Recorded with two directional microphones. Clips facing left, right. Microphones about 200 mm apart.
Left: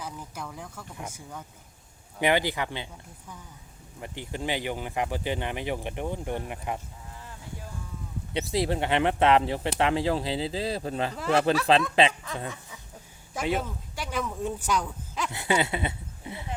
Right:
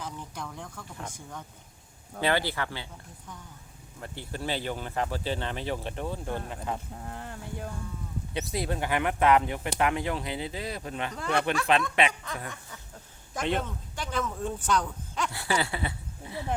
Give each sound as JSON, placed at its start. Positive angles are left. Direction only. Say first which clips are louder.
{"t": 0.0, "sound": "speech", "louder": "even", "side_deg": 5}
{"t": 7.0, "sound": "a sound", "louder": "right 5 dB", "side_deg": -60}
{"t": 8.3, "sound": "speech", "louder": "left 5 dB", "side_deg": 25}
{"t": 11.1, "sound": "speech", "louder": "left 4 dB", "side_deg": 5}
{"t": 11.7, "sound": "speech", "louder": "left 3 dB", "side_deg": 30}
{"t": 12.2, "sound": "speech", "louder": "left 3 dB", "side_deg": 0}
{"t": 15.3, "sound": "speech", "louder": "left 5 dB", "side_deg": 20}